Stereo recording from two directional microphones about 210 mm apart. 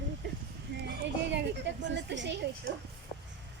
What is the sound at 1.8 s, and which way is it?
Speech, 60° right (ahead or behind).